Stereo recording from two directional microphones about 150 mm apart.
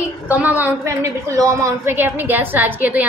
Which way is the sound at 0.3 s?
10° right (ahead or behind).